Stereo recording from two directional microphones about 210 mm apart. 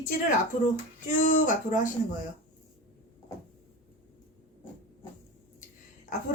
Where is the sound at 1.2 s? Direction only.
40° left (ahead or behind).